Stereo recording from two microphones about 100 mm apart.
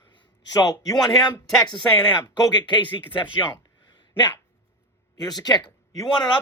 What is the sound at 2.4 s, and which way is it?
Speech, 50° left (ahead or behind).